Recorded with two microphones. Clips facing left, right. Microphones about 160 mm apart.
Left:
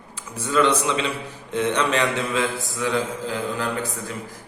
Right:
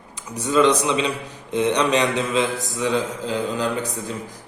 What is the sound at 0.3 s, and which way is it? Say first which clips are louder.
A man's voice: right 3 dB; 15° right (ahead or behind).